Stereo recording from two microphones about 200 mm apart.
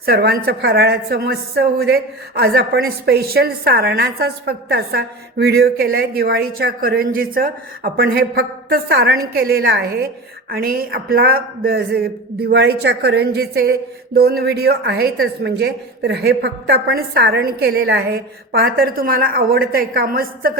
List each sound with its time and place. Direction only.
0.0 s a man's voice: 50° right (ahead or behind)